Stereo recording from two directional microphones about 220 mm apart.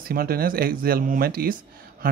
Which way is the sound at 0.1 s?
40° right (ahead or behind).